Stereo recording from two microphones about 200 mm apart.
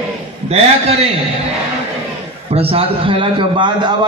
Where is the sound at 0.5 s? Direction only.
30° right (ahead or behind).